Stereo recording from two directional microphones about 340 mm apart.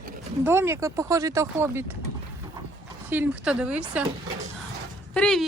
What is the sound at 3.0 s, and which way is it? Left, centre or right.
Speech, centre.